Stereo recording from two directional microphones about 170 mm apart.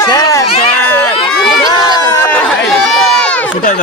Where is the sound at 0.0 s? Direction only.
20° left (ahead or behind).